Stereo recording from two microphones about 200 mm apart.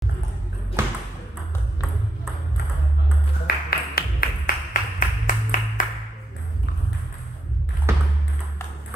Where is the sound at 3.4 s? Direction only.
50° left (ahead or behind).